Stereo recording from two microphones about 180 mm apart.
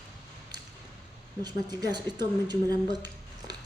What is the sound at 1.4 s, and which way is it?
Speech, 25° right (ahead or behind).